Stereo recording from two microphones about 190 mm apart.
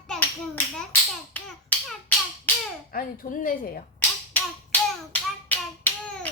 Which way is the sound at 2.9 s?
50° left (ahead or behind).